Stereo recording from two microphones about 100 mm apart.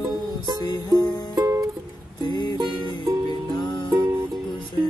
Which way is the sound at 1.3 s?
35° right (ahead or behind).